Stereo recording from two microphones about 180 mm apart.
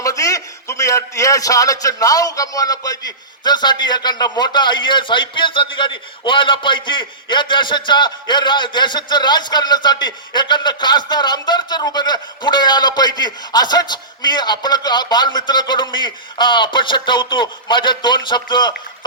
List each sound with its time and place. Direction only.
0.0 s a man's voice: 20° left (ahead or behind)